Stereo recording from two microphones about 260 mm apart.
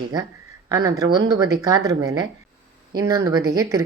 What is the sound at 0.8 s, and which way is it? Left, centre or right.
A woman's voice, centre.